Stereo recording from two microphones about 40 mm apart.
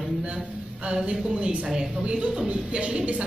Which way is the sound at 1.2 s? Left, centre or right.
Right.